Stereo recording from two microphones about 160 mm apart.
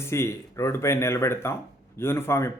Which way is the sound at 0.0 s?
15° left (ahead or behind).